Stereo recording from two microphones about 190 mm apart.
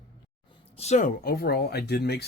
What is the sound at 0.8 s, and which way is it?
Speech, 40° left (ahead or behind).